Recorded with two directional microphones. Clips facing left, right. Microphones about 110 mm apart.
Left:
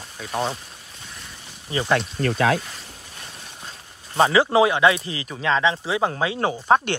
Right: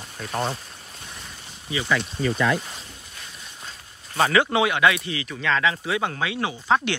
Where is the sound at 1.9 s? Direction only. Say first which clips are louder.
Left 2 dB; 65° left (ahead or behind).